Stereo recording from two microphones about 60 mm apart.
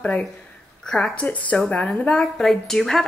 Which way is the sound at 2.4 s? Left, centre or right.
Centre.